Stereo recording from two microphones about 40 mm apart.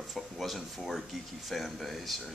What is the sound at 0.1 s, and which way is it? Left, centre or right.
Speech, centre.